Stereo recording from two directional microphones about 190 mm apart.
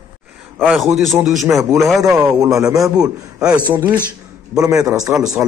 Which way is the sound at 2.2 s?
15° right (ahead or behind).